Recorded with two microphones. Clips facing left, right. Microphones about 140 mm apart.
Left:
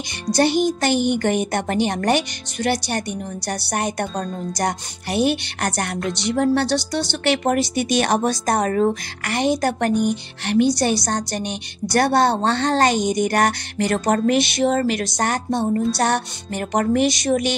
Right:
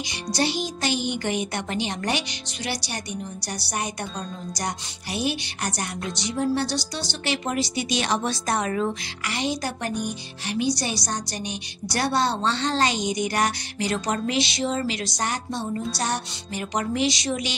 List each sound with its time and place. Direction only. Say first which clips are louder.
0.3 s speech: left 9 dB; 55° left (ahead or behind)
4.6 s music: left 8 dB; 55° left (ahead or behind)
15.9 s speech: left 8 dB; 55° left (ahead or behind)